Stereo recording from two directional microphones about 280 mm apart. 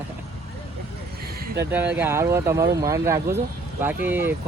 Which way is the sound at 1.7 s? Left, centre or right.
Centre.